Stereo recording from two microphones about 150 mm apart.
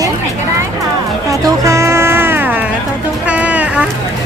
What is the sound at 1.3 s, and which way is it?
Music, 20° right (ahead or behind).